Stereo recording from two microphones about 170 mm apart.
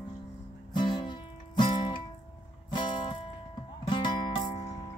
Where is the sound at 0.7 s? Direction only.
25° left (ahead or behind).